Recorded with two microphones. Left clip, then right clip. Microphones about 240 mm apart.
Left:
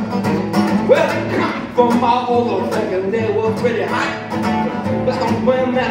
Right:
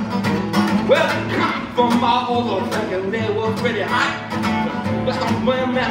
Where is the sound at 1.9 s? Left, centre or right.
Right.